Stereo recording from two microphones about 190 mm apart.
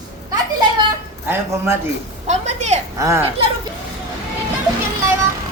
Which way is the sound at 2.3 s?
35° right (ahead or behind).